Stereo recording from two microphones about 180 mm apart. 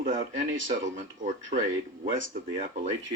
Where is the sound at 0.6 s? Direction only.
45° right (ahead or behind).